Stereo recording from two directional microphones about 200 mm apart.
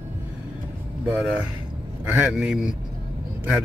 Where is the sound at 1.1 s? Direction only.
5° right (ahead or behind).